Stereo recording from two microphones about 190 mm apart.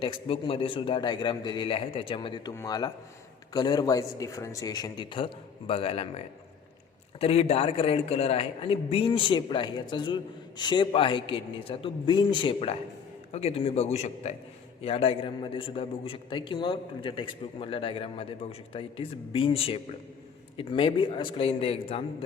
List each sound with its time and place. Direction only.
0.0 s a man's voice: 25° left (ahead or behind)
7.2 s a man's voice: 30° left (ahead or behind)